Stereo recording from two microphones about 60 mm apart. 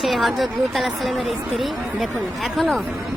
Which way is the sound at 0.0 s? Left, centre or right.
Centre.